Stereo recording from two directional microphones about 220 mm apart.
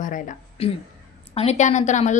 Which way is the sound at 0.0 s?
35° left (ahead or behind).